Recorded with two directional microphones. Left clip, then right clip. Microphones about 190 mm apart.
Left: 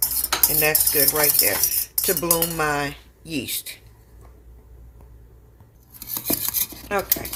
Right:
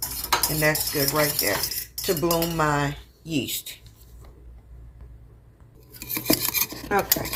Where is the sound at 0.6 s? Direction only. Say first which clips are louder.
Left 1 dB; 45° left (ahead or behind).